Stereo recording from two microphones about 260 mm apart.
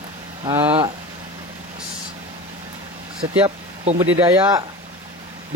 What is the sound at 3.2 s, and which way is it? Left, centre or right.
Speech, centre.